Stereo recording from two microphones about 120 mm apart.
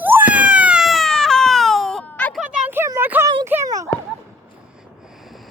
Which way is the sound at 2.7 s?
20° right (ahead or behind).